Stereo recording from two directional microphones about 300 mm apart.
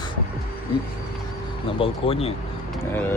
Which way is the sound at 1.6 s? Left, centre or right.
Centre.